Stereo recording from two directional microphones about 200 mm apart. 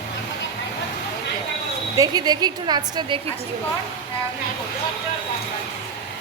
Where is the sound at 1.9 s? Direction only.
20° right (ahead or behind).